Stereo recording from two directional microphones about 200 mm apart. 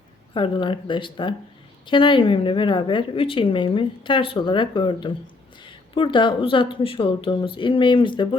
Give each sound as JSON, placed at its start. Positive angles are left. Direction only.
{"t": 0.3, "sound": "a woman's voice", "side_deg": 25}